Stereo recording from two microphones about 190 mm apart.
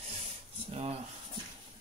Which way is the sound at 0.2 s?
35° right (ahead or behind).